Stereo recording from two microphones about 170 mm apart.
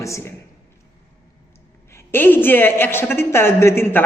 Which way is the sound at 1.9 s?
15° left (ahead or behind).